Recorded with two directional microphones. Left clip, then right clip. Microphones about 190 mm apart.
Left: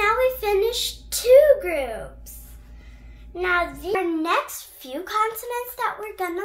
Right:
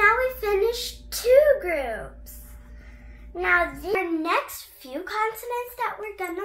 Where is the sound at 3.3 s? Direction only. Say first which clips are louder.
Right 1 dB; 15° left (ahead or behind).